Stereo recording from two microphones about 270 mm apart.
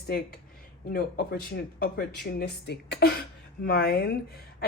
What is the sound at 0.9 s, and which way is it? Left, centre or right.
Speech, left.